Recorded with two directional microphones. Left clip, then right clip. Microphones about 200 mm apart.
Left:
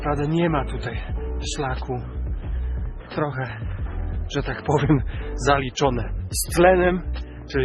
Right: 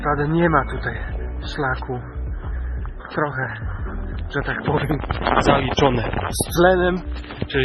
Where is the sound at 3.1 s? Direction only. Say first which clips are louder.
Right 3 dB; 30° left (ahead or behind).